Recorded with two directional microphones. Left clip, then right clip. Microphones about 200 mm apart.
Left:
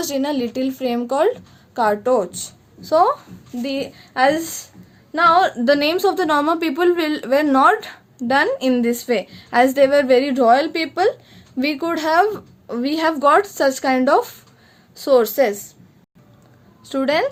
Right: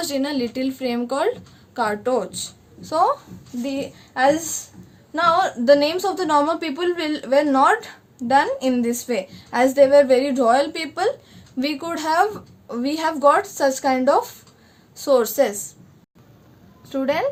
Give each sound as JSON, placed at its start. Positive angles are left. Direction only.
{"t": 0.0, "sound": "a woman's voice", "side_deg": 35}
{"t": 16.9, "sound": "a woman's voice", "side_deg": 55}